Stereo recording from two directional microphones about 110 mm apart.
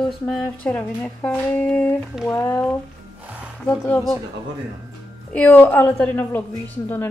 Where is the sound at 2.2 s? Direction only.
25° left (ahead or behind).